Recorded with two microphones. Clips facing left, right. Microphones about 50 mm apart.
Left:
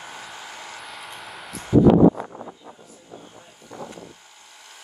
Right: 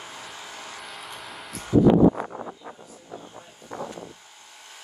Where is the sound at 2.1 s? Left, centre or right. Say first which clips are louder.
Right 2 dB; right.